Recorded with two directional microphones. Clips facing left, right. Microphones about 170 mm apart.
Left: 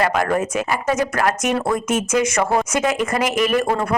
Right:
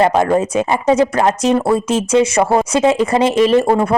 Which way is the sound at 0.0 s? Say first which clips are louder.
Right 6 dB; 25° right (ahead or behind).